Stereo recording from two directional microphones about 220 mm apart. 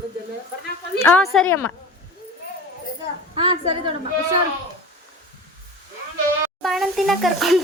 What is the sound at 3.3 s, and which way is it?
Speech, 20° right (ahead or behind).